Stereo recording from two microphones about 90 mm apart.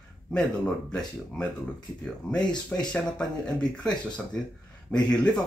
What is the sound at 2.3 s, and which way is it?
Speech, 55° left (ahead or behind).